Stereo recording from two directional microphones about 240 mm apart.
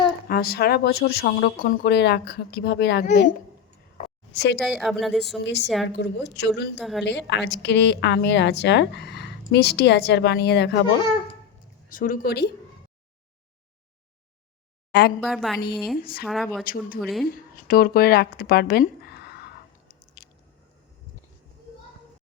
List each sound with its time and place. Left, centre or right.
0.3 s speech: left
3.9 s a sound: left
4.6 s a woman's voice: centre
5.4 s a woman's voice: left
5.6 s a woman's voice: centre
5.9 s a woman's voice: left
6.7 s a woman's voice: centre
7.0 s a woman's voice: left
11.9 s speech: left
15.2 s a woman's voice: centre
16.0 s speech: left
16.2 s a woman's voice: centre
17.2 s speech: left